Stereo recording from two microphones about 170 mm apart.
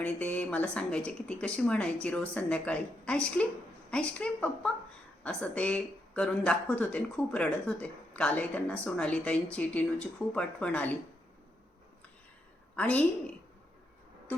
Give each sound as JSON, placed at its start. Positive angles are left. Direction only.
{"t": 0.0, "sound": "a woman's voice", "side_deg": 10}
{"t": 12.7, "sound": "a woman's voice", "side_deg": 10}